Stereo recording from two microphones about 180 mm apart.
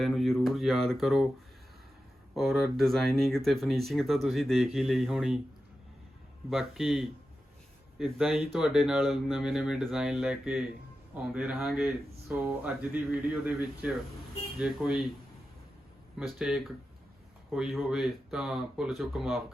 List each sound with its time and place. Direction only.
0.0 s speech: centre (ahead or behind)
2.3 s speech: centre (ahead or behind)
6.5 s speech: centre (ahead or behind)
16.1 s speech: 5° right (ahead or behind)